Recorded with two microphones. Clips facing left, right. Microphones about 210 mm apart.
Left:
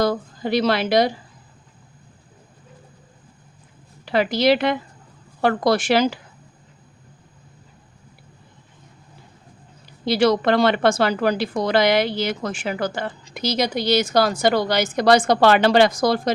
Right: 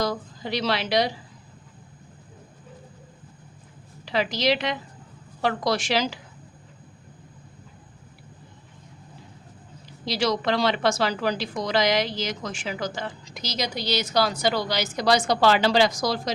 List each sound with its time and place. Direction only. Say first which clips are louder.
0.0 s a woman's voice: left 6 dB; 55° left (ahead or behind)
4.0 s a woman's voice: left 6 dB; 55° left (ahead or behind)
10.1 s speech: left 7 dB; 55° left (ahead or behind)